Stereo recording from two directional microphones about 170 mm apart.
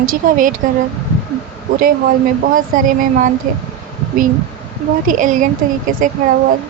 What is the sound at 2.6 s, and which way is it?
A woman's voice, 55° right (ahead or behind).